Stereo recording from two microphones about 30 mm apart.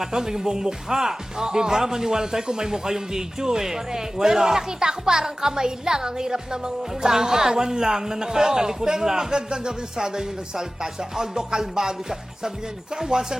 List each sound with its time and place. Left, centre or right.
0.0 s speech: centre
13.0 s speech: right